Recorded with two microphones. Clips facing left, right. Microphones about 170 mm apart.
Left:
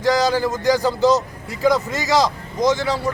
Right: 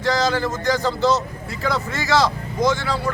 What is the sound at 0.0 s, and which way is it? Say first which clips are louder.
Speech: left 3 dB; 15° left (ahead or behind).